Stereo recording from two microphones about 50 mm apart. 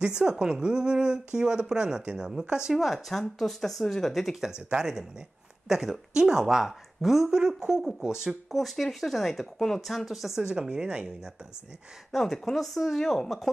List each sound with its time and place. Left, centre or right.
0.0 s speech: centre
2.8 s speech: centre
4.5 s speech: centre
12.1 s speech: centre